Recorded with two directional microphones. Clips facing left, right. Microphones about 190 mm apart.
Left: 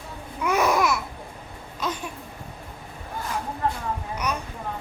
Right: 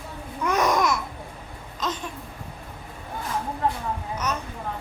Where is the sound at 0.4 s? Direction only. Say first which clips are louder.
Even; 10° left (ahead or behind).